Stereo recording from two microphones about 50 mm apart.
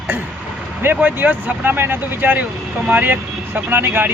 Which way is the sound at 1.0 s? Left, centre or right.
Right.